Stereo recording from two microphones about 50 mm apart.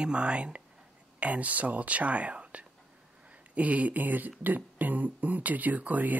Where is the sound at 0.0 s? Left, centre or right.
Right.